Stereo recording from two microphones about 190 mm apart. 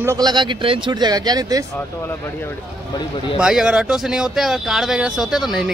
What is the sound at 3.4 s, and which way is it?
A man's voice, 5° right (ahead or behind).